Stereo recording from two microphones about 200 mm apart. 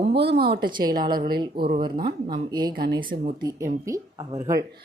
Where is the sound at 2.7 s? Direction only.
50° right (ahead or behind).